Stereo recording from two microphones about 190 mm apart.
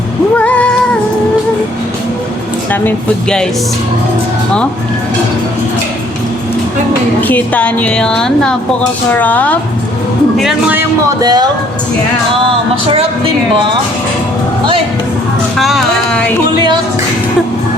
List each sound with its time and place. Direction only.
0.3 s a sound: 5° left (ahead or behind)
2.8 s a woman's voice: 5° left (ahead or behind)
7.2 s a woman's voice: 10° left (ahead or behind)
10.3 s speech: 5° right (ahead or behind); by 11.4 s 20° right (ahead or behind)
12.9 s speech: 30° right (ahead or behind)
15.5 s music: centre (ahead or behind)